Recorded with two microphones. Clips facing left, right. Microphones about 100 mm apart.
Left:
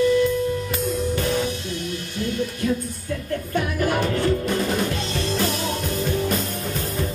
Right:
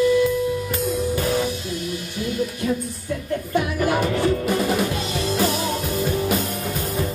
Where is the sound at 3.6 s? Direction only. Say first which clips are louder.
Right 1 dB; 10° right (ahead or behind).